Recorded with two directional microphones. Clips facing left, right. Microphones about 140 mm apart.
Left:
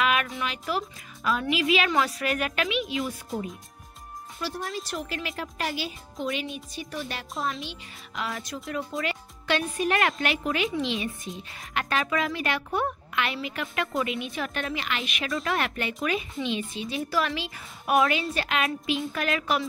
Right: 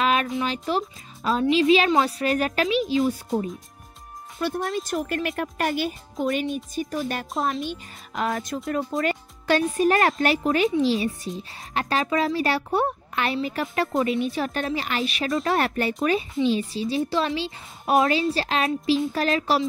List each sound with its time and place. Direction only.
0.0 s speech: 30° right (ahead or behind)
4.4 s a child's voice: 55° right (ahead or behind); by 19.6 s 30° right (ahead or behind)